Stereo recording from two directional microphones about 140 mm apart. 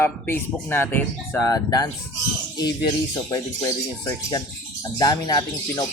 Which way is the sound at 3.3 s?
25° left (ahead or behind).